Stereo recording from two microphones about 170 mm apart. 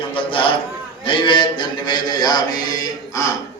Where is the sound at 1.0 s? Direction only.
30° left (ahead or behind).